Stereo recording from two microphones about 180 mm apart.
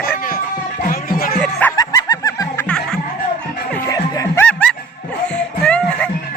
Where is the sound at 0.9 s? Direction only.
55° left (ahead or behind).